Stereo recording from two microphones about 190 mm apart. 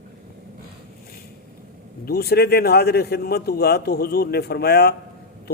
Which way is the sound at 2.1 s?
55° left (ahead or behind).